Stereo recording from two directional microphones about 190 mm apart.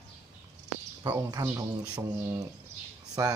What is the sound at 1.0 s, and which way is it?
Speech, 20° right (ahead or behind).